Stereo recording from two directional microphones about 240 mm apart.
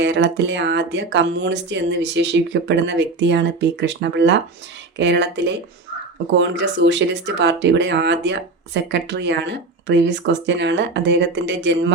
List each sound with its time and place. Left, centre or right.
0.0 s speech: right